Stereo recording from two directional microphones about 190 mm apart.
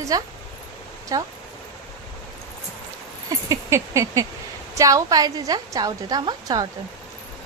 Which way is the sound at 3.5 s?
15° right (ahead or behind).